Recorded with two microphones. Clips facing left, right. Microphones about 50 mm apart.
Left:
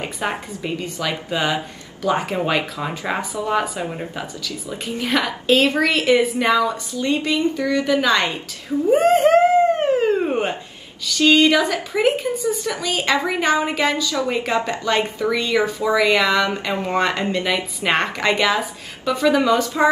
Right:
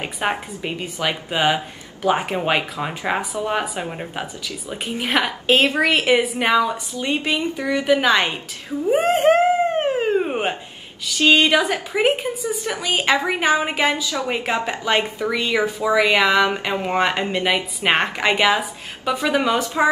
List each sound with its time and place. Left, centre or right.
0.0 s a woman's voice: right
3.8 s speech: centre
4.1 s a woman's voice: right
8.9 s a sound: centre
11.1 s a woman's voice: right